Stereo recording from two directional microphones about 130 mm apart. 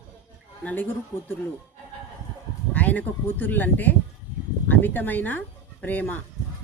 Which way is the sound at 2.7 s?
10° left (ahead or behind).